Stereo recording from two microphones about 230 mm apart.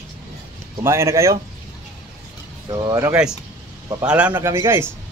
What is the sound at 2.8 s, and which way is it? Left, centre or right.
A man's voice, centre.